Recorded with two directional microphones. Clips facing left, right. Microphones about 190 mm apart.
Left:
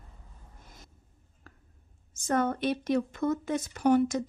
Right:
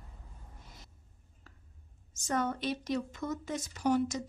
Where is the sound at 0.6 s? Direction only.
50° left (ahead or behind).